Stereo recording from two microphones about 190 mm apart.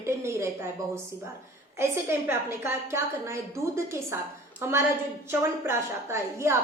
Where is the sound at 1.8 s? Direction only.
15° right (ahead or behind).